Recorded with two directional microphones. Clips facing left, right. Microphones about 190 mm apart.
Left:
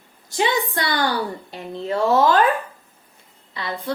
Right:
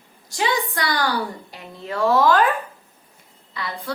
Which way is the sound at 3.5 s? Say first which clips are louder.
Left 2 dB; 25° left (ahead or behind).